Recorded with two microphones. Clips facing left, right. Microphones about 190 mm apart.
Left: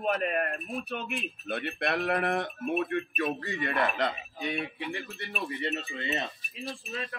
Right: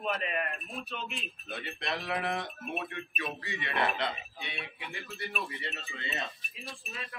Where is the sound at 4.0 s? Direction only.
45° left (ahead or behind).